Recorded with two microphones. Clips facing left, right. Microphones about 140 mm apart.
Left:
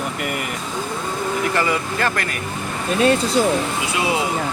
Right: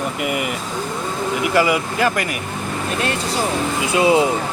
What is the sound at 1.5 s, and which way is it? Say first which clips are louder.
Speech: right 4 dB; 10° right (ahead or behind).